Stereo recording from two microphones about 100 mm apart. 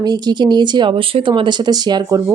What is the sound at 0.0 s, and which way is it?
Speech, 45° right (ahead or behind).